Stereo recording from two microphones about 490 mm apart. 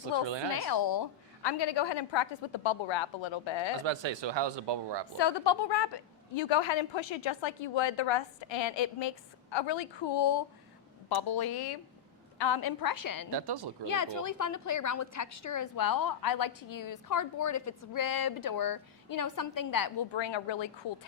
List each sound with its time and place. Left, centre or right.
0.5 s a woman's voice: left
3.8 s speech: right
5.1 s a woman's voice: left
13.3 s speech: right
13.8 s a woman's voice: left
20.1 s a woman's voice: left